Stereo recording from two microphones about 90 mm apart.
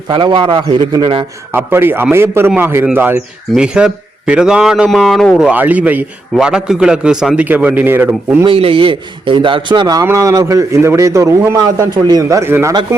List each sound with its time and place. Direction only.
0.1 s a man's voice: 65° right (ahead or behind)
1.5 s a man's voice: 25° right (ahead or behind); by 5.3 s centre (ahead or behind)
5.4 s a man's voice: 15° right (ahead or behind)
6.3 s a man's voice: 5° right (ahead or behind)
7.4 s a man's voice: 20° right (ahead or behind)
8.4 s a man's voice: 85° right; by 11.5 s 35° right (ahead or behind)
11.5 s a man's voice: 45° right (ahead or behind)
12.4 s a man's voice: 30° right (ahead or behind)